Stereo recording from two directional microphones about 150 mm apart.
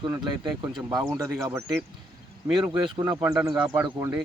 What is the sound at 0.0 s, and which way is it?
Speech, 30° right (ahead or behind).